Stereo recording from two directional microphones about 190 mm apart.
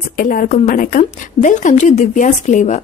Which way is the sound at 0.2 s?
45° left (ahead or behind).